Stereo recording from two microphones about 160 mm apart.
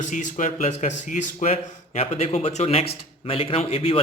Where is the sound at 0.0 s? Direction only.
50° left (ahead or behind).